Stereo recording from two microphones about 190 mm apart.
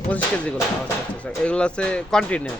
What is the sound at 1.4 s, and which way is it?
Speech, 5° left (ahead or behind).